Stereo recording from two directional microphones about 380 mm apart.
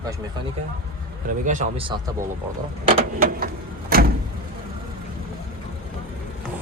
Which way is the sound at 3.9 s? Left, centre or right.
Right.